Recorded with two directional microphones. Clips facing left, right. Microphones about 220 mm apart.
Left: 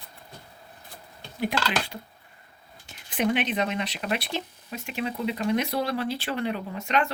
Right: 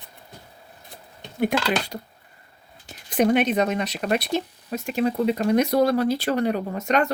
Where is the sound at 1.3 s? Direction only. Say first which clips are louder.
Right 5 dB; 50° right (ahead or behind).